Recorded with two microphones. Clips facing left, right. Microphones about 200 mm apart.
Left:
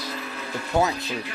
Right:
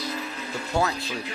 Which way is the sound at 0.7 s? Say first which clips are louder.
Left 3 dB; 20° left (ahead or behind).